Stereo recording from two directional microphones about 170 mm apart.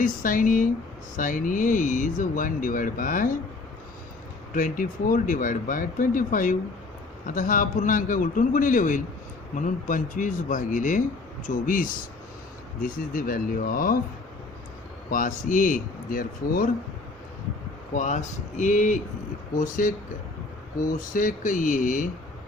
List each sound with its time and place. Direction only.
0.0 s speech: 50° left (ahead or behind)
4.5 s speech: 50° left (ahead or behind)
15.1 s speech: 50° left (ahead or behind)
17.9 s speech: 45° left (ahead or behind)
21.1 s speech: 50° left (ahead or behind)